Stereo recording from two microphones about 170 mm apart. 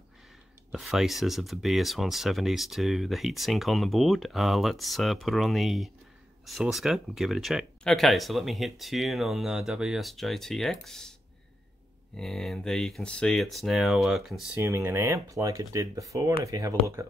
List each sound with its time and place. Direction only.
0.7 s speech: centre (ahead or behind)
12.2 s speech: centre (ahead or behind)
14.6 s speech: 15° right (ahead or behind)